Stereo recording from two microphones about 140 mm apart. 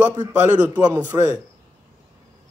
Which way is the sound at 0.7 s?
30° right (ahead or behind).